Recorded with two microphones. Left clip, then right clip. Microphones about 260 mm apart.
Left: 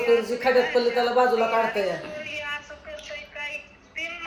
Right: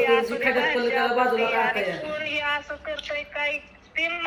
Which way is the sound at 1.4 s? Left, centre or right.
Left.